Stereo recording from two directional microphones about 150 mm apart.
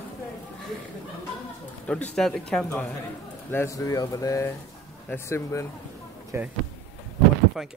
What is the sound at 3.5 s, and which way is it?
Speech, 20° left (ahead or behind).